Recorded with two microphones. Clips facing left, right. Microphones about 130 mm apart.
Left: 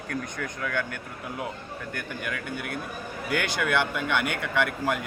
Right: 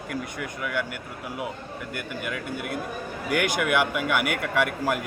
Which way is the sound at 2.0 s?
5° right (ahead or behind).